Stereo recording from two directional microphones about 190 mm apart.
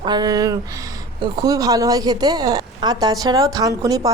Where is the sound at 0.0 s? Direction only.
20° right (ahead or behind).